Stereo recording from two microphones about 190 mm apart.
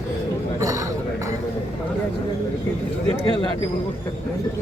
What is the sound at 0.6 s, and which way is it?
Speech, 15° right (ahead or behind).